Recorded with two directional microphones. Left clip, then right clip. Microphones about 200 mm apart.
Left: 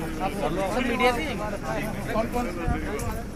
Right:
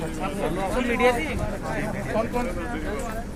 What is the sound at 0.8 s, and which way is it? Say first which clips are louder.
Speech: right 3 dB; 50° right (ahead or behind).